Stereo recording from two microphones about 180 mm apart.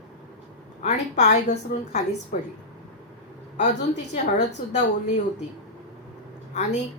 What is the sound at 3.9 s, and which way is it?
Speech, 70° left (ahead or behind).